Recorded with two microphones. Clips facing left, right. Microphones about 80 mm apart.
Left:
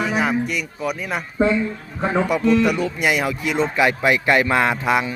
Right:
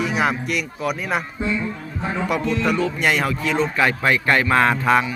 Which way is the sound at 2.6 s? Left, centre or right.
Centre.